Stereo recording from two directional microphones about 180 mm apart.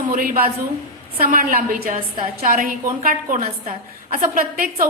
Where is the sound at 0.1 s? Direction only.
50° right (ahead or behind).